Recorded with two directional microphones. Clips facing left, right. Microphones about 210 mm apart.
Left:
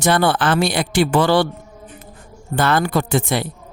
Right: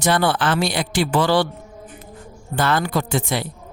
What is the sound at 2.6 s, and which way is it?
Speech, 55° left (ahead or behind).